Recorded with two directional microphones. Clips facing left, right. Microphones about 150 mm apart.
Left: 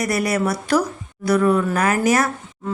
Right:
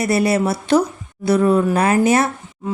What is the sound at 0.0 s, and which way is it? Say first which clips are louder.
A woman's voice: right 4 dB; 30° right (ahead or behind).